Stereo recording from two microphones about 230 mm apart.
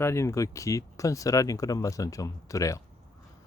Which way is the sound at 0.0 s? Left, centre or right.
Centre.